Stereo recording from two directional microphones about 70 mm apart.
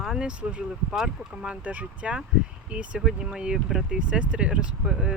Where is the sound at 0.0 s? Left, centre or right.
Centre.